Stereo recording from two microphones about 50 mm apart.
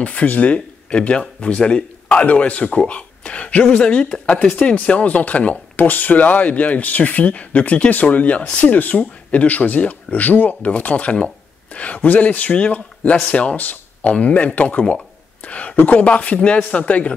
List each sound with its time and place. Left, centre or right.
0.0 s a man's voice: left
8.7 s speech: left